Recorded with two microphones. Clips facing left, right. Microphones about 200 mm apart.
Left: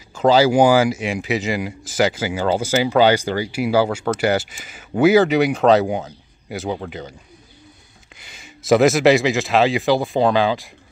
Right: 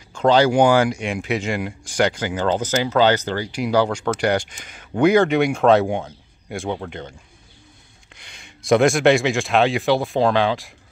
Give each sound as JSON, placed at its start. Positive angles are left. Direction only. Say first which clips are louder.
{"t": 0.1, "sound": "speech", "louder": "left 1 dB", "side_deg": 5}
{"t": 8.2, "sound": "speech", "louder": "left 3 dB", "side_deg": 5}